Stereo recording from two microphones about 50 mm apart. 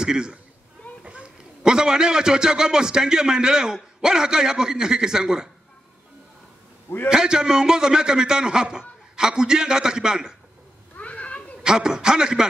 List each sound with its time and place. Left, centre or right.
0.0 s a man's voice: centre
7.1 s a man's voice: centre
11.0 s children playing: left
11.6 s a man's voice: centre